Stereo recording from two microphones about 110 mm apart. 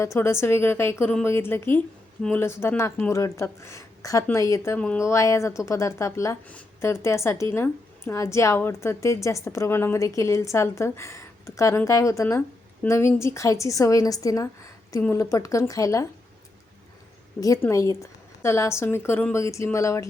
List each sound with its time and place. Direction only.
0.0 s a woman's voice: 25° left (ahead or behind)
17.6 s a woman's voice: 30° left (ahead or behind)